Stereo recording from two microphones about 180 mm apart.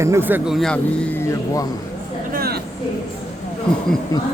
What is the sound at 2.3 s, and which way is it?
Vehicle, 55° right (ahead or behind).